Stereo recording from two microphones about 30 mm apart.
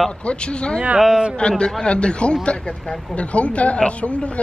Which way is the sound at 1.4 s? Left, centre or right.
Left.